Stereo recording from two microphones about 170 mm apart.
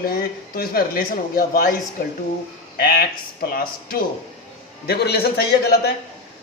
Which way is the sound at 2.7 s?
65° left (ahead or behind).